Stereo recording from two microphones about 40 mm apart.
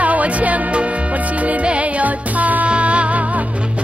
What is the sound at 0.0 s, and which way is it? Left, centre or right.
Music, right.